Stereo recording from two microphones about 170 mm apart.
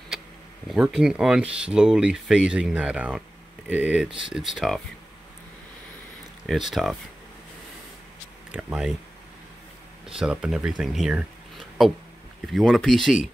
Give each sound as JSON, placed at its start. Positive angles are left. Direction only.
{"t": 0.7, "sound": "speech", "side_deg": -5}
{"t": 6.4, "sound": "speech", "side_deg": 0}
{"t": 8.5, "sound": "speech", "side_deg": -10}
{"t": 10.0, "sound": "speech", "side_deg": -5}